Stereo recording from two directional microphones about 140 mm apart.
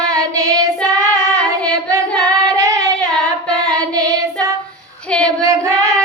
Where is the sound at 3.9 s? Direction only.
25° right (ahead or behind).